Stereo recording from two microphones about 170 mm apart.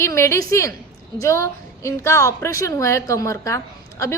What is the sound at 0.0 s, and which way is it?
A woman's voice, 15° left (ahead or behind).